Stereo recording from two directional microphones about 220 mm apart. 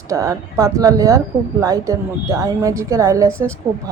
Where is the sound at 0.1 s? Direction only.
15° right (ahead or behind).